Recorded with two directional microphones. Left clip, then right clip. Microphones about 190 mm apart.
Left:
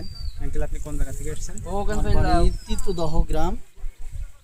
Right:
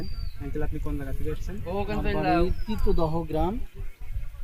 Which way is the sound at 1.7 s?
50° left (ahead or behind).